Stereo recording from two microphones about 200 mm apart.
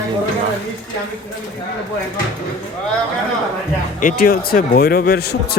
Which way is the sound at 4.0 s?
45° left (ahead or behind).